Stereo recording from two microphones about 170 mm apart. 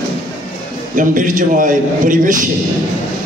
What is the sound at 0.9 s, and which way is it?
A man's voice, 50° right (ahead or behind).